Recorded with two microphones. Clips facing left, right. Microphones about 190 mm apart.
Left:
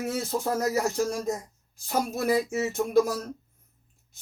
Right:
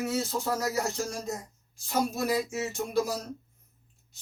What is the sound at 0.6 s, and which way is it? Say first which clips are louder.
Speech: left 5 dB; 50° left (ahead or behind).